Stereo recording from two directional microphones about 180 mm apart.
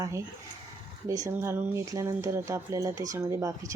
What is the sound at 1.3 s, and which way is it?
Speech, 15° right (ahead or behind).